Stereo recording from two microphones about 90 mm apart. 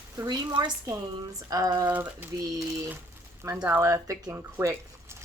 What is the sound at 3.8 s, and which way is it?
Speech, 35° right (ahead or behind).